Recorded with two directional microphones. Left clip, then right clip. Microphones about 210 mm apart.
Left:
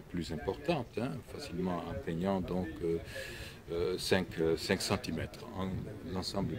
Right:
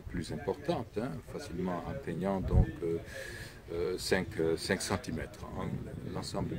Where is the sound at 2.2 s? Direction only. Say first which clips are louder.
Even; 15° left (ahead or behind).